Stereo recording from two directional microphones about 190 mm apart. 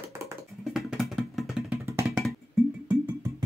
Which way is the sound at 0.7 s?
Centre (ahead or behind).